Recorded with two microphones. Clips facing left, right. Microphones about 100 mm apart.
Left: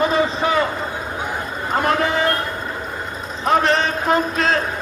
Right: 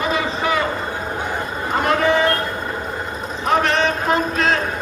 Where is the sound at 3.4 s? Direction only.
35° left (ahead or behind).